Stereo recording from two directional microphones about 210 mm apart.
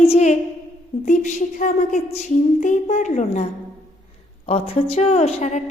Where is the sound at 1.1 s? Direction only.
35° left (ahead or behind).